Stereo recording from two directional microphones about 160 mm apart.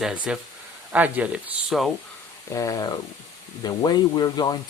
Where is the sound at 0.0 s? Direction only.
5° right (ahead or behind).